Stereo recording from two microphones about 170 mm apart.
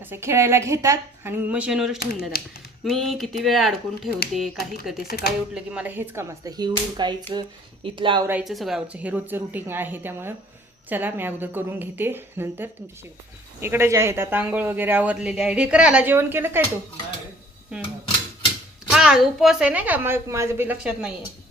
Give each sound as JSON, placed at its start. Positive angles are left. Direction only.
{"t": 0.0, "sound": "speech", "side_deg": -15}
{"t": 5.0, "sound": "speech", "side_deg": 70}
{"t": 5.5, "sound": "speech", "side_deg": -5}
{"t": 8.3, "sound": "speech", "side_deg": -5}
{"t": 18.9, "sound": "speech", "side_deg": -5}